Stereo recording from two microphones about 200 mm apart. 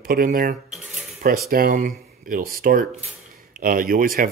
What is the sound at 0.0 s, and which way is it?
Speech, 45° right (ahead or behind).